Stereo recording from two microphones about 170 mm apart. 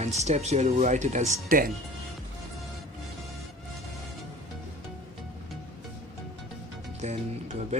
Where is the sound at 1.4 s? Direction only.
55° right (ahead or behind).